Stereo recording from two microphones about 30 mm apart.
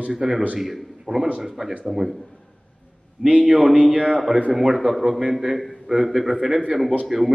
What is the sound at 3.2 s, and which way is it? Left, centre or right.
Speech, right.